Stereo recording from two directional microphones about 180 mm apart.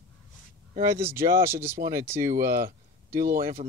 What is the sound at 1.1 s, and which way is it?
Speech, 15° right (ahead or behind).